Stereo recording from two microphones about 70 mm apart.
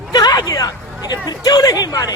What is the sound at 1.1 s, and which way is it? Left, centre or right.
Speech, left.